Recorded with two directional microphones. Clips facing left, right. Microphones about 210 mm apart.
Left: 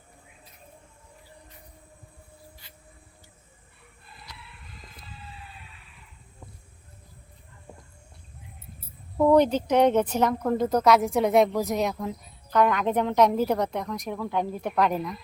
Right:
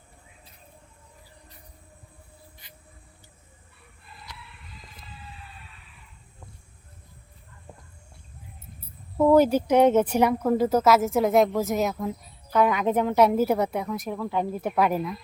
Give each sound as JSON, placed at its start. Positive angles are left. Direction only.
{"t": 2.6, "sound": "music", "side_deg": -20}
{"t": 9.1, "sound": "speech", "side_deg": 0}